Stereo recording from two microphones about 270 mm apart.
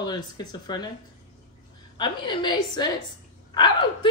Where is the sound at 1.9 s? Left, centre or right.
Centre.